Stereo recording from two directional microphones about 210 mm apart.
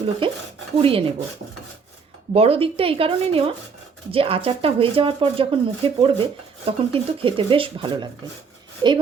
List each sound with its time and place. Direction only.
0.8 s speech: 25° right (ahead or behind)
2.3 s speech: 30° right (ahead or behind)